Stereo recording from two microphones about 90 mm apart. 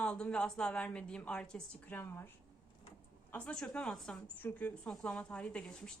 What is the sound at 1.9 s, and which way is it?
Speech, 25° left (ahead or behind).